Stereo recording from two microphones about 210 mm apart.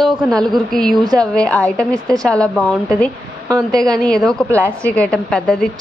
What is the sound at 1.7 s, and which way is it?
Speech, 15° right (ahead or behind).